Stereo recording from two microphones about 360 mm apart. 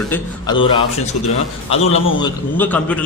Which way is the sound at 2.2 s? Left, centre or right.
Centre.